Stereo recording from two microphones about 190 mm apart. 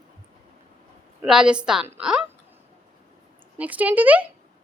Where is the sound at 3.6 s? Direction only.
10° right (ahead or behind).